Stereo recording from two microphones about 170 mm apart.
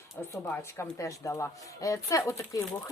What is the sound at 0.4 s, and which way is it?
Speech, 10° left (ahead or behind).